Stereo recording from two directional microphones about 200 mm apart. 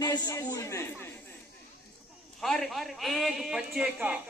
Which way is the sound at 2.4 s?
Centre (ahead or behind).